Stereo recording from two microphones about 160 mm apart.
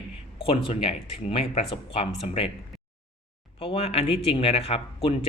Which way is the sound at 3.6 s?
35° left (ahead or behind).